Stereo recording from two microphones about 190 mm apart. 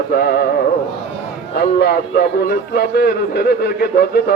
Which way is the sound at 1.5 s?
55° left (ahead or behind).